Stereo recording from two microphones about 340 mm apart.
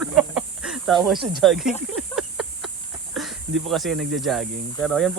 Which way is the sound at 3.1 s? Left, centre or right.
Centre.